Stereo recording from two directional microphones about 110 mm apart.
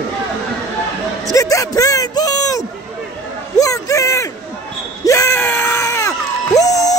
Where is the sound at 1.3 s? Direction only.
30° left (ahead or behind).